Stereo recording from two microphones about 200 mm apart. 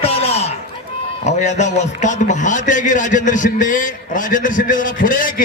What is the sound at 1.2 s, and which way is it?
A man's voice, 35° left (ahead or behind).